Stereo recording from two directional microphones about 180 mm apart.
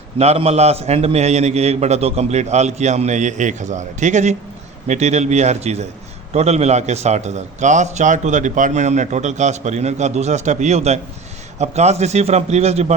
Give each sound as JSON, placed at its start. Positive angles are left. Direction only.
{"t": 0.2, "sound": "a man's voice", "side_deg": -35}